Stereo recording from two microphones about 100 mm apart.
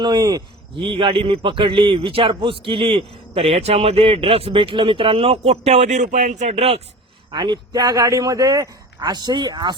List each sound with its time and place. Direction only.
0.0 s speech: 45° right (ahead or behind)
0.8 s a man's voice: 65° right (ahead or behind); by 6.8 s 90° right
7.3 s speech: 50° right (ahead or behind)